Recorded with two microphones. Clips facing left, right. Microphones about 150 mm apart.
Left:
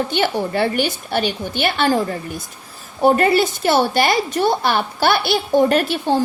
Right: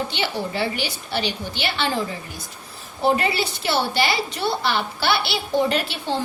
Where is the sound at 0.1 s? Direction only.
50° left (ahead or behind).